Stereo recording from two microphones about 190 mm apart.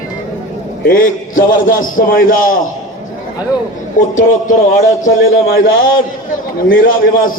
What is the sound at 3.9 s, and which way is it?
Speech, 45° left (ahead or behind).